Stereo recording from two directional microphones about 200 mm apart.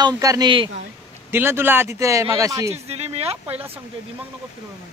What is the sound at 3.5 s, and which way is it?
Speech, 10° right (ahead or behind).